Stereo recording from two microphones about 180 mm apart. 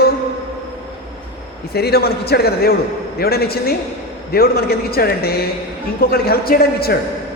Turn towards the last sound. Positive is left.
turn(degrees=60)  # may be behind; listen again after turning